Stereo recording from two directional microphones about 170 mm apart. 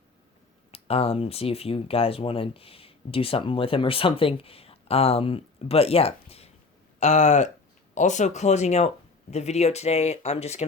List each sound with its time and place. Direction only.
0.7 s speech: 35° left (ahead or behind)